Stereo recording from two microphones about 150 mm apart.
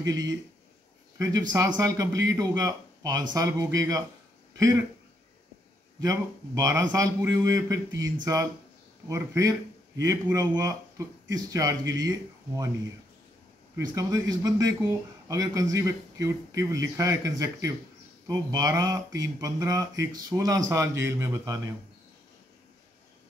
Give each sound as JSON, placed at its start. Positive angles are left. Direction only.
{"t": 0.0, "sound": "speech", "side_deg": -25}
{"t": 5.9, "sound": "speech", "side_deg": -20}
{"t": 13.9, "sound": "speech", "side_deg": -25}